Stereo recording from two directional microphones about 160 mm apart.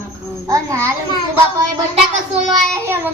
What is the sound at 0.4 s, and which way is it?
Speech, 20° right (ahead or behind).